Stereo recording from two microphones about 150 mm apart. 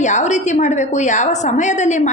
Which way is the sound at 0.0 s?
50° left (ahead or behind).